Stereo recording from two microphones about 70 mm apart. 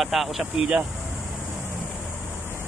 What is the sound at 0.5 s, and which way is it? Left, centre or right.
Speech, centre.